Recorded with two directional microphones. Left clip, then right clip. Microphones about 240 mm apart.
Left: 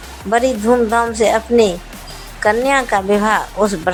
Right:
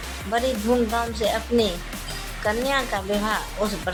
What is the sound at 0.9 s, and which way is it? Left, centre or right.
A woman's voice, left.